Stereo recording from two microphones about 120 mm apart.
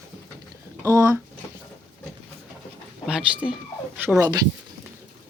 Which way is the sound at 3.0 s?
10° right (ahead or behind).